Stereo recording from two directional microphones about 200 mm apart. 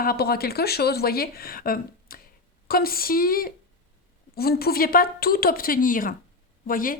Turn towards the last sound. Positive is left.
turn(degrees=45)  # may be behind; listen again after turning